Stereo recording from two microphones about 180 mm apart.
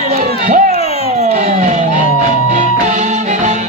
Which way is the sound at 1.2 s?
40° right (ahead or behind).